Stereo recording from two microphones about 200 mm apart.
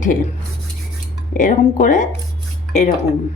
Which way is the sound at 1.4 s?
40° left (ahead or behind).